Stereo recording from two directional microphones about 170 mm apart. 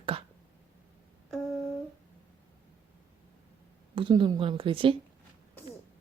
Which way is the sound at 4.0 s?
30° right (ahead or behind).